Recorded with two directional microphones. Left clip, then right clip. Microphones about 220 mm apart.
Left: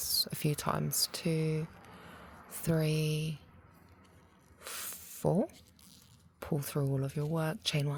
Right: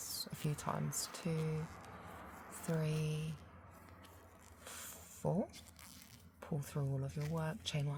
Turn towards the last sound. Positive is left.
turn(degrees=40)  # may be behind; listen again after turning